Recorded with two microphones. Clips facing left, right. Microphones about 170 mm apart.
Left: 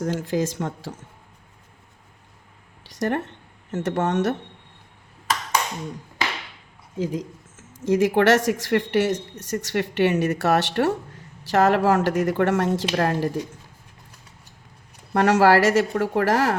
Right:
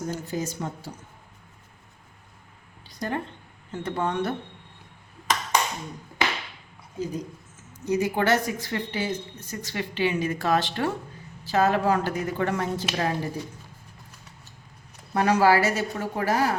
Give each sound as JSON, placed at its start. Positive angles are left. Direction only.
{"t": 0.0, "sound": "speech", "side_deg": 90}
{"t": 3.0, "sound": "speech", "side_deg": 75}
{"t": 7.0, "sound": "speech", "side_deg": 90}
{"t": 15.1, "sound": "speech", "side_deg": 75}